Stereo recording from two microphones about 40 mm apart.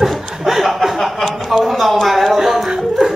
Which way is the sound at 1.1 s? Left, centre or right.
Centre.